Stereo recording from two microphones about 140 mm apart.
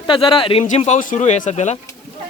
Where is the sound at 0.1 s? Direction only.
35° left (ahead or behind).